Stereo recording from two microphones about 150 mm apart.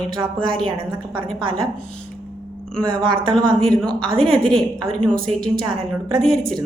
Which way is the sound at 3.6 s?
5° left (ahead or behind).